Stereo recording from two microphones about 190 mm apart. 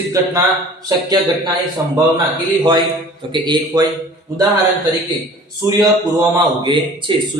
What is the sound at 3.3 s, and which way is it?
Speech, 25° right (ahead or behind).